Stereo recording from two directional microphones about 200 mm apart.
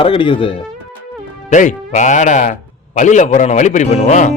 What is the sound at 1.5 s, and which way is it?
Speech, 40° left (ahead or behind).